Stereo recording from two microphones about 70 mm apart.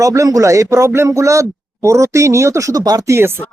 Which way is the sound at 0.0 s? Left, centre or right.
Right.